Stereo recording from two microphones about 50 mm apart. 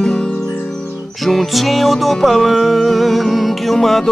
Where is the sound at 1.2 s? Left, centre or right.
Centre.